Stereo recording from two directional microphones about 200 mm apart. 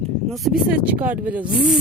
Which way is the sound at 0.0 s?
Centre (ahead or behind).